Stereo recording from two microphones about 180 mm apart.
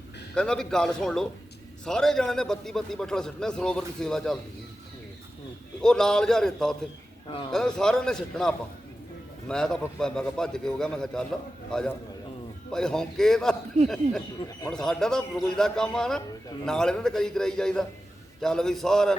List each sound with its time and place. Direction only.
0.3 s a man's voice: 5° left (ahead or behind)
5.8 s a man's voice: 5° left (ahead or behind)
7.3 s speech: 25° left (ahead or behind)
7.5 s a man's voice: 5° left (ahead or behind)